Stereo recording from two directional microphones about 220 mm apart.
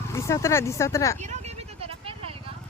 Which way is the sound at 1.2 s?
30° right (ahead or behind).